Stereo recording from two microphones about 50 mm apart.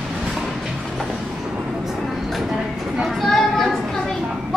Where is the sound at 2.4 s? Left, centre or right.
Centre.